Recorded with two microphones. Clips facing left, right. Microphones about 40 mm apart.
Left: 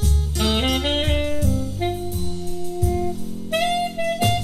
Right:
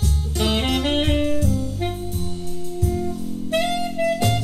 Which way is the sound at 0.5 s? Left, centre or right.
Centre.